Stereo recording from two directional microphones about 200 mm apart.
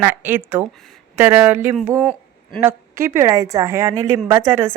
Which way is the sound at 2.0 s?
5° left (ahead or behind).